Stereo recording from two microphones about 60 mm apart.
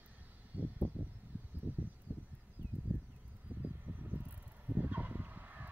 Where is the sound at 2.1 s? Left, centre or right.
Left.